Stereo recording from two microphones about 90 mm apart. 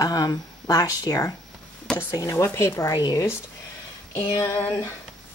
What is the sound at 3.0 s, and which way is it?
Speech, 45° left (ahead or behind).